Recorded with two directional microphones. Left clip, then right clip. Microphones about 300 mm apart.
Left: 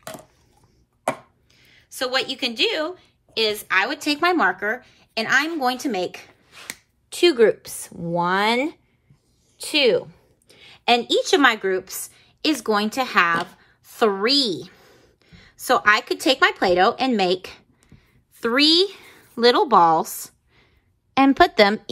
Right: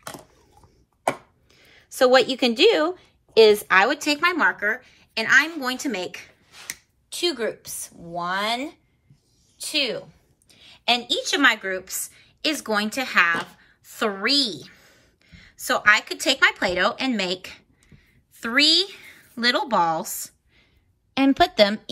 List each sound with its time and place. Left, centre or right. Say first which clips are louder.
1.0 s speech: right 1 dB; centre
7.1 s a woman's voice: left 9 dB; left